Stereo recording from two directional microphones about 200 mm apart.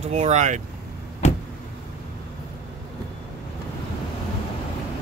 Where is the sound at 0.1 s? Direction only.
35° right (ahead or behind).